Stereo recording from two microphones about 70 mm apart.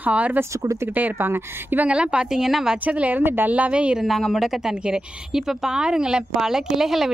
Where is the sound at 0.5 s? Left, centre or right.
Right.